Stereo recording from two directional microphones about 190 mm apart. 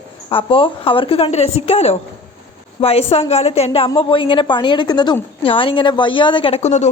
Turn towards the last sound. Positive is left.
turn(degrees=35)  # may be behind; listen again after turning